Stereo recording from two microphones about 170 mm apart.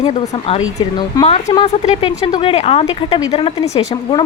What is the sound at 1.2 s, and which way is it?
Speech, 40° left (ahead or behind).